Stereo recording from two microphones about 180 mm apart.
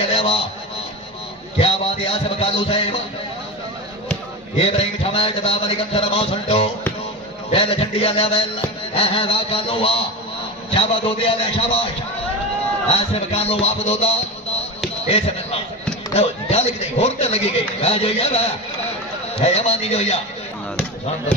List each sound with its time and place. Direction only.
0.1 s a sound: 30° left (ahead or behind)
1.6 s music: 30° left (ahead or behind)
4.6 s a man's voice: 30° left (ahead or behind)
12.9 s a man's voice: 35° left (ahead or behind)
19.4 s a man's voice: 35° left (ahead or behind)